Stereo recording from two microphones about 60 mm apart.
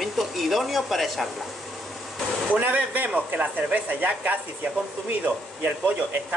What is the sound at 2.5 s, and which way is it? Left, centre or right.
A man's voice, right.